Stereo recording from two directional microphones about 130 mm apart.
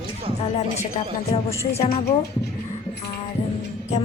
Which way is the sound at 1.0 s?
45° left (ahead or behind).